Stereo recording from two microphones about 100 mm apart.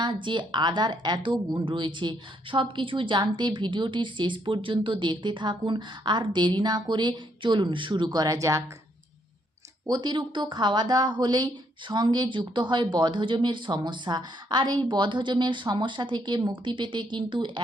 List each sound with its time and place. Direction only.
0.0 s a woman's voice: 50° right (ahead or behind); by 8.6 s 30° right (ahead or behind)
9.8 s a woman's voice: 45° right (ahead or behind)